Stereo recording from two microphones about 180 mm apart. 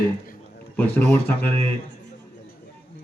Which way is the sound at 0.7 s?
10° left (ahead or behind).